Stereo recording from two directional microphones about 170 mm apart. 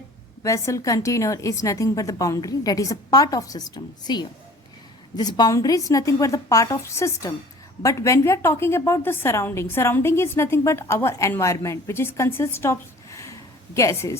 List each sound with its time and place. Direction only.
0.4 s a woman's voice: 15° left (ahead or behind)